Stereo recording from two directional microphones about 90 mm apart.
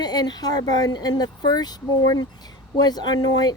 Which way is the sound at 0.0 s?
50° left (ahead or behind).